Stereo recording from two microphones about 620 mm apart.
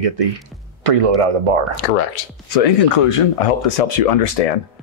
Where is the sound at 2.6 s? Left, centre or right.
Left.